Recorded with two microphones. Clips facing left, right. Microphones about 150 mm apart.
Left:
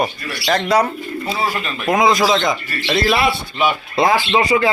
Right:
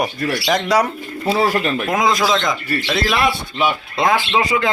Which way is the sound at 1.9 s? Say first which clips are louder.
Left 4 dB; centre (ahead or behind).